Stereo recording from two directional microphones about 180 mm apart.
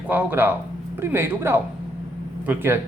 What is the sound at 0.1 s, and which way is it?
Speech, 10° right (ahead or behind).